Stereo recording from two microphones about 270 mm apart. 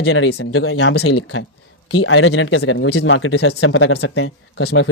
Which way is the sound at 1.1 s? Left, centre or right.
Left.